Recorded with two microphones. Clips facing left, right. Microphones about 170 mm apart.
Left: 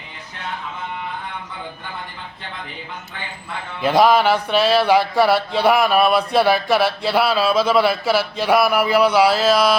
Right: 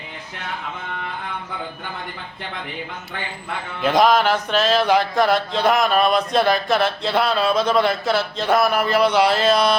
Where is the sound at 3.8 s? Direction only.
5° left (ahead or behind).